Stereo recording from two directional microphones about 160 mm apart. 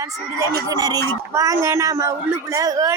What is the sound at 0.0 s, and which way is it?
A man's voice, 20° right (ahead or behind).